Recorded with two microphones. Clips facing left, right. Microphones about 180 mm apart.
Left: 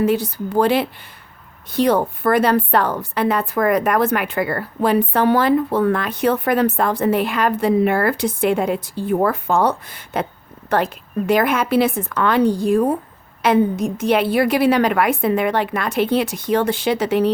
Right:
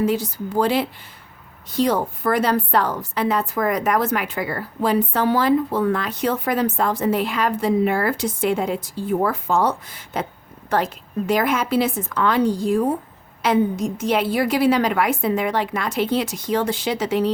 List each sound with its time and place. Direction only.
0.0 s a woman's voice: 60° left (ahead or behind)